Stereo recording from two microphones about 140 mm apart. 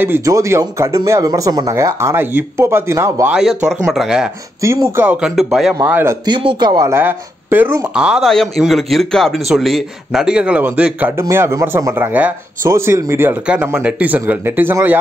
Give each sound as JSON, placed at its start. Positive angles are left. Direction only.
{"t": 0.0, "sound": "speech", "side_deg": -20}
{"t": 3.3, "sound": "speech", "side_deg": -5}
{"t": 4.6, "sound": "speech", "side_deg": -20}
{"t": 5.8, "sound": "speech", "side_deg": -15}
{"t": 6.2, "sound": "speech", "side_deg": -30}
{"t": 6.9, "sound": "speech", "side_deg": -15}